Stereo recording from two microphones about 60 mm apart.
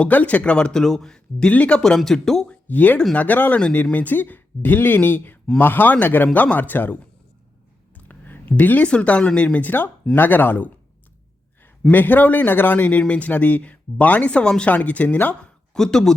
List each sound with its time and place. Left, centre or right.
0.0 s speech: left; by 1.5 s centre
1.5 s speech: left
2.0 s speech: centre
2.5 s a man's voice: left
7.9 s a sound: left
8.9 s a man's voice: centre
11.9 s speech: left
15.7 s speech: centre